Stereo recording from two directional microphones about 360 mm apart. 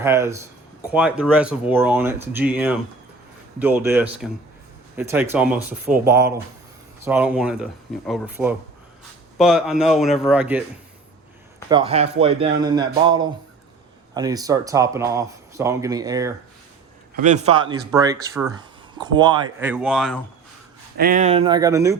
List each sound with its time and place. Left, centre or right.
0.0 s speech: centre
11.7 s speech: centre
21.0 s speech: right